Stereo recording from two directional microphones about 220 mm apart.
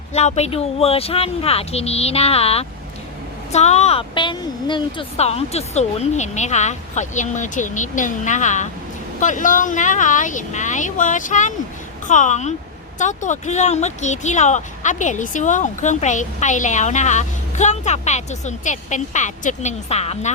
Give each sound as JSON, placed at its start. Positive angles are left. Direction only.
{"t": 0.1, "sound": "speech", "side_deg": 30}